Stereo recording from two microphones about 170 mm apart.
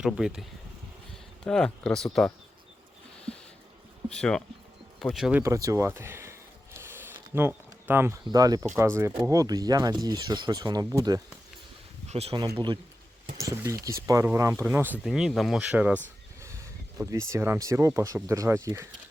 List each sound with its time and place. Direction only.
0.0 s speech: 5° right (ahead or behind)
3.3 s a sound: 5° left (ahead or behind)
4.1 s speech: 5° left (ahead or behind)
5.4 s speech: 20° right (ahead or behind)
12.0 s speech: 35° right (ahead or behind)
12.4 s speech: 25° right (ahead or behind)
13.4 s speech: 15° right (ahead or behind)
16.4 s neigh: 20° right (ahead or behind)
17.1 s speech: 15° right (ahead or behind)